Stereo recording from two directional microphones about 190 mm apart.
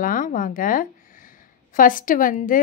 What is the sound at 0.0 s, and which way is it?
A woman's voice, 45° left (ahead or behind).